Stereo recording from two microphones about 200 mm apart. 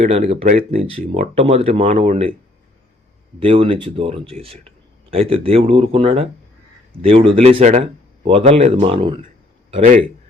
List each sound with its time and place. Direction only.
0.0 s speech: 30° right (ahead or behind)
3.4 s speech: 25° right (ahead or behind)